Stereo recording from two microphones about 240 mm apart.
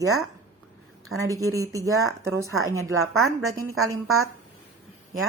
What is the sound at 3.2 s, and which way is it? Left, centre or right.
Speech, right.